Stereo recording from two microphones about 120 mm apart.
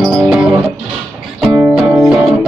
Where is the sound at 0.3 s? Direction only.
10° right (ahead or behind).